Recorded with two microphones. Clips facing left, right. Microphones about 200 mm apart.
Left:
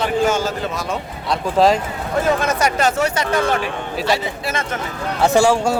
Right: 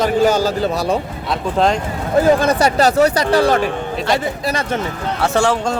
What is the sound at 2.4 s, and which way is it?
Speech, 35° right (ahead or behind).